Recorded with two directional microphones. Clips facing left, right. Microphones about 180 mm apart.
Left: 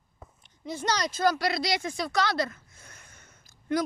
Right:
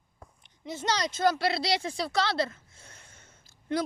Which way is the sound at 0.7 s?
20° right (ahead or behind).